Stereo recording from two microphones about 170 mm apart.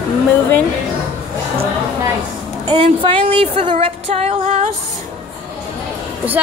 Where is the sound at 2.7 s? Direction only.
30° right (ahead or behind).